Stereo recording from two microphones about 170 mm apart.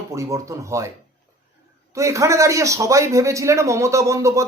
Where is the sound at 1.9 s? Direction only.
20° right (ahead or behind).